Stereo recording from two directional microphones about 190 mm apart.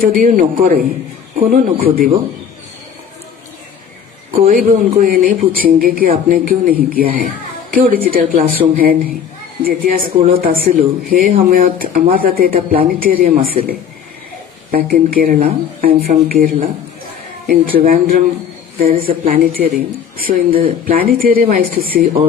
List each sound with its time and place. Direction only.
0.0 s speech: 45° right (ahead or behind)
4.3 s a woman's voice: 45° right (ahead or behind)
20.5 s speech: 30° right (ahead or behind)
20.8 s speech: 50° right (ahead or behind)